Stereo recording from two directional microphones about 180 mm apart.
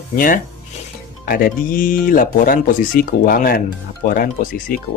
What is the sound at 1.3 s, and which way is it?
Speech, 50° left (ahead or behind).